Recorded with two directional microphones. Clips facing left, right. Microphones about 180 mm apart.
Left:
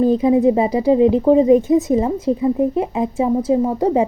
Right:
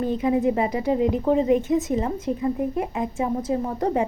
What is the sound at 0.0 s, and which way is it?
Speech, 35° left (ahead or behind).